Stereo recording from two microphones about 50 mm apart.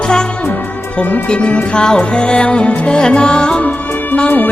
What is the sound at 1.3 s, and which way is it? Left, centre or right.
Music, left.